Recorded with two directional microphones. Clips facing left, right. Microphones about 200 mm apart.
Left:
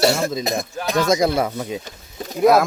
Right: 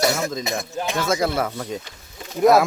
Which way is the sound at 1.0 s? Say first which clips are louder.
Left 5 dB; 15° left (ahead or behind).